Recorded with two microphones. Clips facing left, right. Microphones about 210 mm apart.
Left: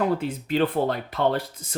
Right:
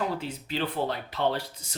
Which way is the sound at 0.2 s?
50° left (ahead or behind).